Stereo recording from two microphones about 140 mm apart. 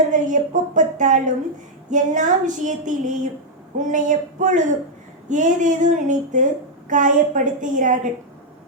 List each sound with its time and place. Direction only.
0.1 s speech: 65° right (ahead or behind)